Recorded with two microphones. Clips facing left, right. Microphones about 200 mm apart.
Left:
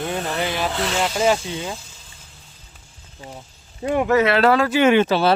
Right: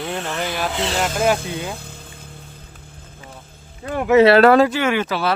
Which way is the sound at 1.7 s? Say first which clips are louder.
Right 2 dB; 60° right (ahead or behind).